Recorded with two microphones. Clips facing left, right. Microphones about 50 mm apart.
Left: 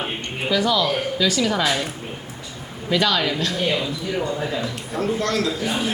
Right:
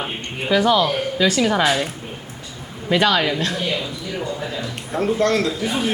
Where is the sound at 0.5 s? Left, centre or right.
Right.